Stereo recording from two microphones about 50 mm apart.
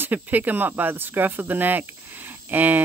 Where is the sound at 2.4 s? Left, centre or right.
Right.